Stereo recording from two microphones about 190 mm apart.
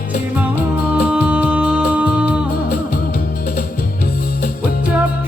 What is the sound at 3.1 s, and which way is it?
Music, 55° left (ahead or behind).